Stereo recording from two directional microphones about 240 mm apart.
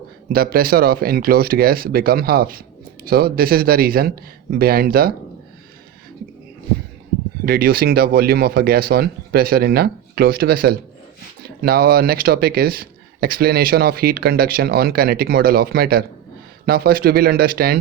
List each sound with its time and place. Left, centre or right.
0.3 s speech: right
7.4 s speech: right